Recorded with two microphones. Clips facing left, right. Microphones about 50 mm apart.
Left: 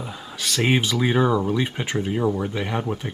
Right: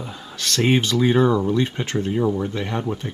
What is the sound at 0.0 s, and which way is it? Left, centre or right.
Speech, centre.